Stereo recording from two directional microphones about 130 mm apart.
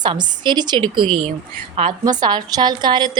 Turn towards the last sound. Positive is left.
turn(degrees=-35)  # may be behind; listen again after turning